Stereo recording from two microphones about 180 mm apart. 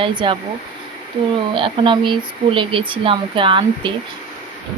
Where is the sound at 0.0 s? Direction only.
25° right (ahead or behind).